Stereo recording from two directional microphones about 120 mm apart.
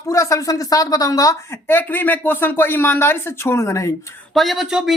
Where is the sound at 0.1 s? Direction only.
25° left (ahead or behind).